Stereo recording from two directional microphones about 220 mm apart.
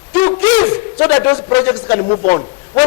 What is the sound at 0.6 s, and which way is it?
Speech, 15° left (ahead or behind).